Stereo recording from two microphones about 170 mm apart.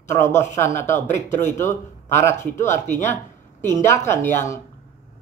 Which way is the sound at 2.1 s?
15° left (ahead or behind).